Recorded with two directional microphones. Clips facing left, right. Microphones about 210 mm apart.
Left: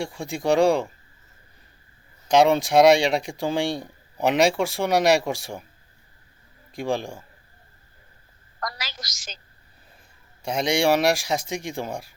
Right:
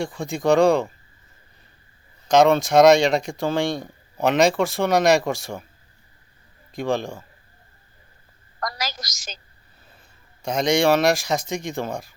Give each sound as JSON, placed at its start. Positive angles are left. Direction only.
{"t": 0.0, "sound": "speech", "side_deg": 10}
{"t": 2.2, "sound": "speech", "side_deg": 10}
{"t": 6.7, "sound": "speech", "side_deg": 10}
{"t": 8.6, "sound": "a woman's voice", "side_deg": -40}
{"t": 10.4, "sound": "speech", "side_deg": 10}